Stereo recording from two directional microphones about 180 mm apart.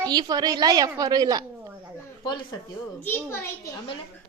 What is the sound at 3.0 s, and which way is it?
Speech, 10° left (ahead or behind).